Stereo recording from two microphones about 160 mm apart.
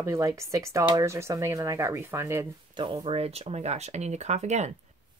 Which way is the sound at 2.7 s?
30° right (ahead or behind).